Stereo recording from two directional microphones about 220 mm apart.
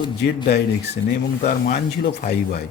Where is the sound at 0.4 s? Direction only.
50° left (ahead or behind).